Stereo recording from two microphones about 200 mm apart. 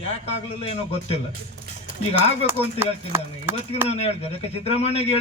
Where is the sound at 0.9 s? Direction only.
30° left (ahead or behind).